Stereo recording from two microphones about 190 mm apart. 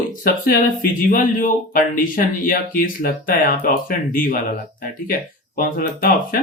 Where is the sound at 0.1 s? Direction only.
45° left (ahead or behind).